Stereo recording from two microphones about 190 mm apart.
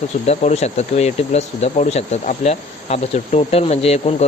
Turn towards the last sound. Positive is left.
turn(degrees=35)  # may be behind; listen again after turning